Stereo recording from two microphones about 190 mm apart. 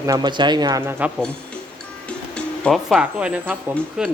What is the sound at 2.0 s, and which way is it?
Speech, 5° left (ahead or behind).